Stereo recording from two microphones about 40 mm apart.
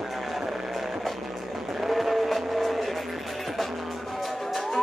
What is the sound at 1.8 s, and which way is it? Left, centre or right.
Vehicle, centre.